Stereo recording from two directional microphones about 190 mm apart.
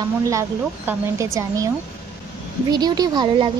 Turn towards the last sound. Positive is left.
turn(degrees=-20)  # may be behind; listen again after turning